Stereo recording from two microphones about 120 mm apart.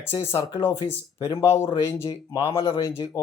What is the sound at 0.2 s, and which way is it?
Speech, 20° left (ahead or behind).